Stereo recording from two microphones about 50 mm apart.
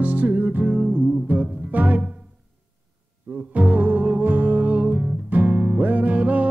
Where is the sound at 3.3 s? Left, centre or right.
Right.